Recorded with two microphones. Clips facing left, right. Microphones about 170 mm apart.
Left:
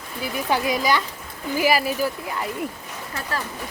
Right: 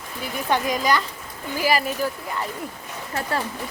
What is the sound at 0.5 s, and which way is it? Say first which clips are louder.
Speech: even; 5° left (ahead or behind).